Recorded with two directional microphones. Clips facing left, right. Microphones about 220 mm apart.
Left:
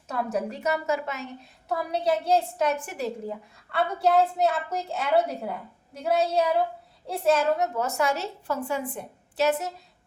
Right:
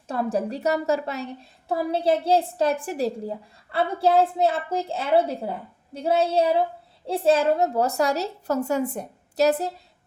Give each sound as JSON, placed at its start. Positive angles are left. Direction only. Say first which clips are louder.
{"t": 0.1, "sound": "a woman's voice", "louder": "right 3 dB", "side_deg": -30}